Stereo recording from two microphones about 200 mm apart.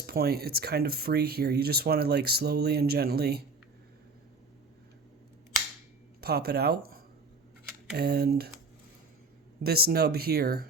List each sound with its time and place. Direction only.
0.0 s speech: 50° right (ahead or behind)
6.2 s speech: 50° right (ahead or behind)
9.6 s speech: 50° right (ahead or behind)